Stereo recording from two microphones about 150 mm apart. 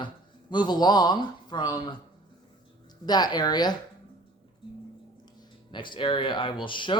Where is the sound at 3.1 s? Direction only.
30° left (ahead or behind).